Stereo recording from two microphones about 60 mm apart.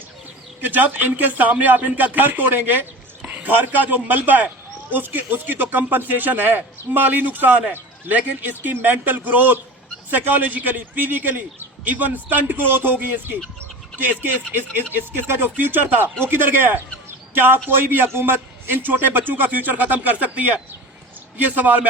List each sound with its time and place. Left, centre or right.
0.6 s a man's voice: right